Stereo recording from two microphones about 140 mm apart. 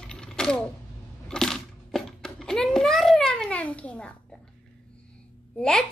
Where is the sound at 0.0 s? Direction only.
5° left (ahead or behind).